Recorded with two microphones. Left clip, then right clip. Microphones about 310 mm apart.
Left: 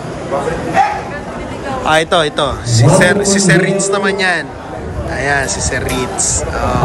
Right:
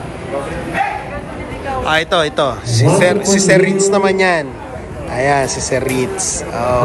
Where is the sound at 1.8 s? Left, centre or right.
Centre.